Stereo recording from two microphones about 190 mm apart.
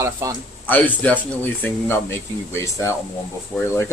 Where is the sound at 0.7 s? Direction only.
10° left (ahead or behind).